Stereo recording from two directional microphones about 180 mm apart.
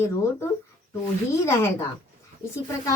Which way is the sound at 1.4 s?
15° left (ahead or behind).